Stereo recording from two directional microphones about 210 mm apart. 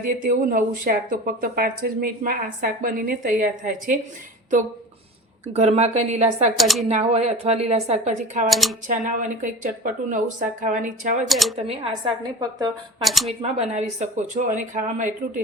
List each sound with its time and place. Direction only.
0.3 s speech: 40° right (ahead or behind)
5.5 s speech: 30° right (ahead or behind)
6.6 s speech: centre (ahead or behind)
6.8 s speech: 30° right (ahead or behind)
8.4 s speech: centre (ahead or behind)
8.9 s speech: 40° right (ahead or behind)
11.3 s speech: centre (ahead or behind)
11.5 s speech: 30° right (ahead or behind)
13.0 s speech: centre (ahead or behind)
13.4 s speech: 30° right (ahead or behind)